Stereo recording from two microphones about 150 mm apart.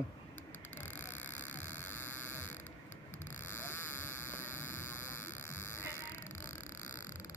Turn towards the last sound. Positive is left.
turn(degrees=15)  # may be behind; listen again after turning